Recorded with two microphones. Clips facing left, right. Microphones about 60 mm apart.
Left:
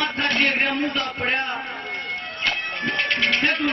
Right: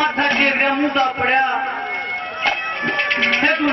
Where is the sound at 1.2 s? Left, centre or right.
Right.